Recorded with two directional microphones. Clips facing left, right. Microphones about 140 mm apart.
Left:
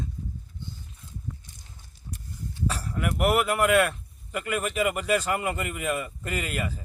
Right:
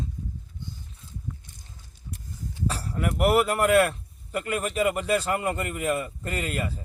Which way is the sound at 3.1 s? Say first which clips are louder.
Right 2 dB; centre (ahead or behind).